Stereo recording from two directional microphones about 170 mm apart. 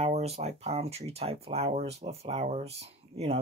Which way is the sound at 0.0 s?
40° right (ahead or behind).